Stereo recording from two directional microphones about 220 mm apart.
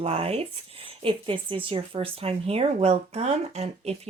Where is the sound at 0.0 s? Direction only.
25° right (ahead or behind).